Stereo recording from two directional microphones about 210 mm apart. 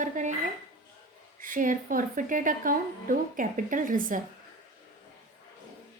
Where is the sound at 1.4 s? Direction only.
40° right (ahead or behind).